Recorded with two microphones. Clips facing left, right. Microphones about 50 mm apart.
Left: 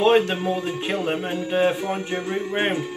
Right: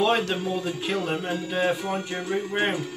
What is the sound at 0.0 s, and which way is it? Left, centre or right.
Speech, left.